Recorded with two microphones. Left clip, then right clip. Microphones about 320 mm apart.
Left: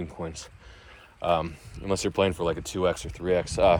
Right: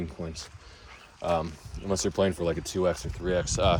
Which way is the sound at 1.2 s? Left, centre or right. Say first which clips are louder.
Left 3 dB; left.